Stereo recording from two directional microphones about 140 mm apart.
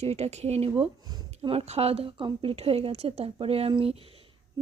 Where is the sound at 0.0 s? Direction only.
50° right (ahead or behind).